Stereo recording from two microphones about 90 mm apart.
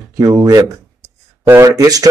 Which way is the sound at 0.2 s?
40° right (ahead or behind).